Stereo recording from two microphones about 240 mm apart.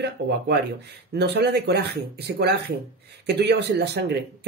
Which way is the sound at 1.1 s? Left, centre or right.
Right.